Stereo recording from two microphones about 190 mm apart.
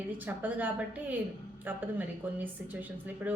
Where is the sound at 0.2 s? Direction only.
10° right (ahead or behind).